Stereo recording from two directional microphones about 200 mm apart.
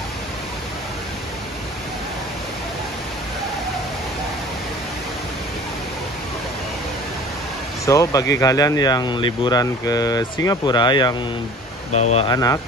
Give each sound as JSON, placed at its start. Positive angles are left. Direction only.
{"t": 7.8, "sound": "speech", "side_deg": 15}
{"t": 11.9, "sound": "speech", "side_deg": 35}
{"t": 12.3, "sound": "speech", "side_deg": 20}